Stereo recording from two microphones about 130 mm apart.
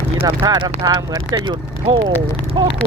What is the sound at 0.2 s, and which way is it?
Speech, 25° right (ahead or behind).